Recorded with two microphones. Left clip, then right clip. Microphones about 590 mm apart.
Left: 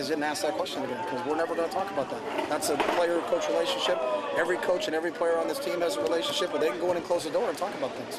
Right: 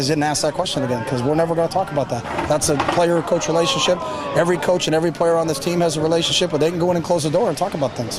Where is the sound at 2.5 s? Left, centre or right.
Right.